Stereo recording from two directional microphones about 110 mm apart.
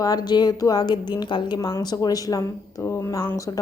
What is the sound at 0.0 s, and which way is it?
Speech, 35° left (ahead or behind).